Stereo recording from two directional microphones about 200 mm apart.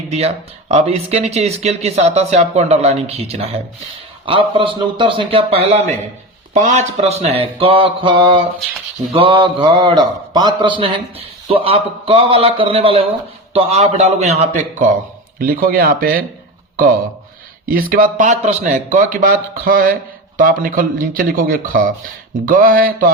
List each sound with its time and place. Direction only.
0.1 s speech: 30° right (ahead or behind)
4.3 s mantra: 25° right (ahead or behind)
13.5 s speech: 30° right (ahead or behind)
15.4 s speech: 45° right (ahead or behind)
17.7 s speech: 45° right (ahead or behind)